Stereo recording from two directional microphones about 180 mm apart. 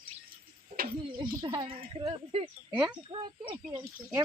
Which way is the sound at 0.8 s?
55° right (ahead or behind).